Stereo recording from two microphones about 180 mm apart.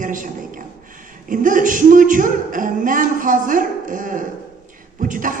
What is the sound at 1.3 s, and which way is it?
A woman's voice, 50° right (ahead or behind).